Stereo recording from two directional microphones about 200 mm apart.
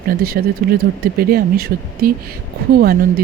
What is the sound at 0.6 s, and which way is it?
Speech, 45° right (ahead or behind).